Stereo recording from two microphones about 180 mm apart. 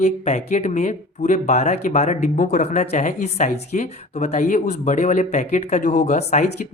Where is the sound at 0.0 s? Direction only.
40° left (ahead or behind).